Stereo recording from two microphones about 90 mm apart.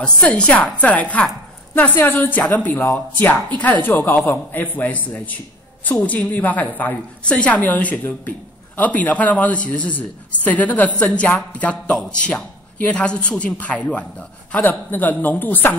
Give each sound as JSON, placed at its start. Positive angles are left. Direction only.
{"t": 0.0, "sound": "a man's voice", "side_deg": 10}